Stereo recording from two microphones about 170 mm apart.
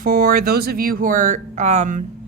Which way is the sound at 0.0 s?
55° right (ahead or behind).